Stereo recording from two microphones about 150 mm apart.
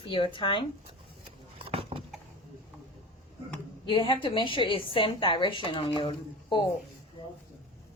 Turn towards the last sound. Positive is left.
turn(degrees=30)  # may be behind; listen again after turning